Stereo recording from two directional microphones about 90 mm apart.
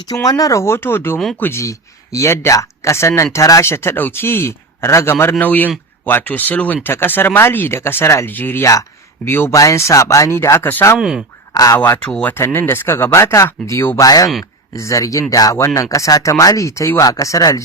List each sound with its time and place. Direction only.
0.1 s speech: 40° left (ahead or behind); by 10.8 s 25° left (ahead or behind)
11.5 s speech: 40° left (ahead or behind)
12.0 s speech: 15° left (ahead or behind)
12.5 s speech: 25° left (ahead or behind)